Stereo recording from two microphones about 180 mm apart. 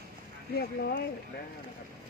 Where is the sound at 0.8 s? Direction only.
60° left (ahead or behind).